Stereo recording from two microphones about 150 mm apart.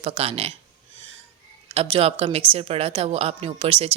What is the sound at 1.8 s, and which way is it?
A woman's voice, 40° right (ahead or behind).